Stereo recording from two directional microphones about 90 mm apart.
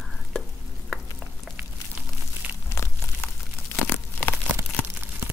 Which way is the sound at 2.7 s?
30° left (ahead or behind).